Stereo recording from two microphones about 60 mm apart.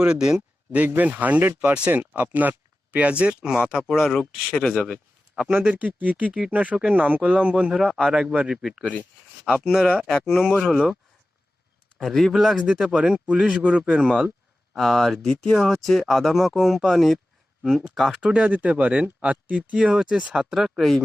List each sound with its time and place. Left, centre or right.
0.0 s speech: centre
0.9 s speech: right
3.9 s speech: centre
5.5 s speech: right
7.4 s speech: centre
8.0 s speech: centre
11.9 s speech: centre
14.7 s speech: centre
18.2 s speech: centre
18.4 s speech: right; by 21.0 s centre